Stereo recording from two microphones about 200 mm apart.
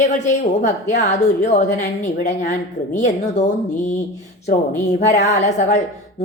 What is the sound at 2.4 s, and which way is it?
A woman's voice, 40° left (ahead or behind).